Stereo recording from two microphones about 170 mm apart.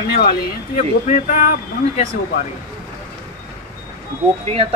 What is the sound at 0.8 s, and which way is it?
Speech, 45° left (ahead or behind).